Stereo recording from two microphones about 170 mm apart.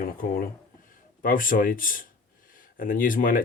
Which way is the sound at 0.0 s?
60° left (ahead or behind).